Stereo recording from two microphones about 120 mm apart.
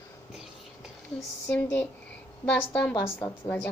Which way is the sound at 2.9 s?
35° left (ahead or behind).